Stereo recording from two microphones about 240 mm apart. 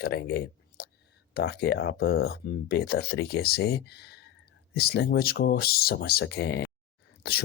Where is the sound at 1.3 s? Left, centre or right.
Left.